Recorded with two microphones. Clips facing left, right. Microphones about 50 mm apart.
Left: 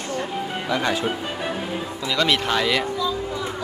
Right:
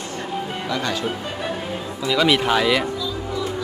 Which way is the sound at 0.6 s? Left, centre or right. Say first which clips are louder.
Left 3 dB; centre.